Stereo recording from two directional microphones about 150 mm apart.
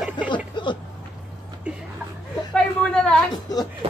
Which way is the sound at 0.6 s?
30° left (ahead or behind).